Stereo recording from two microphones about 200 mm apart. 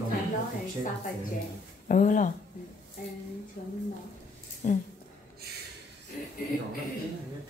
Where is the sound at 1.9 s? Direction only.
40° left (ahead or behind).